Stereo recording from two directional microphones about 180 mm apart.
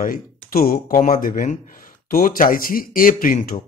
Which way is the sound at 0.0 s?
50° left (ahead or behind).